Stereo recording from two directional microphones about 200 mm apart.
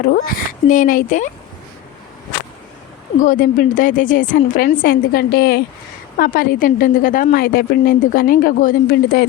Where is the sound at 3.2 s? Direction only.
40° left (ahead or behind).